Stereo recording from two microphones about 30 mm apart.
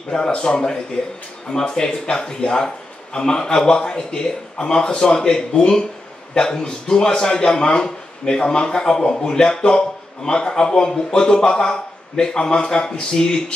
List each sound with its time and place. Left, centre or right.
0.1 s speech: left
1.5 s a man's voice: left